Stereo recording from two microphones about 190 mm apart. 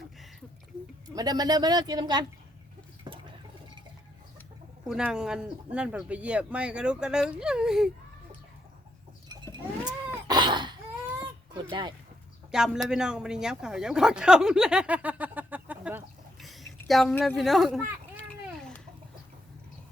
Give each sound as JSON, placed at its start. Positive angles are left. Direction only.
{"t": 1.1, "sound": "speech", "side_deg": -20}
{"t": 4.9, "sound": "speech", "side_deg": -5}
{"t": 9.3, "sound": "livestock", "side_deg": -20}
{"t": 10.2, "sound": "a sound", "side_deg": -25}
{"t": 11.7, "sound": "speech", "side_deg": -25}
{"t": 12.5, "sound": "a man's voice", "side_deg": -5}